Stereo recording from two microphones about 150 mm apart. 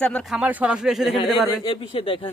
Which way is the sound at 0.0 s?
5° left (ahead or behind).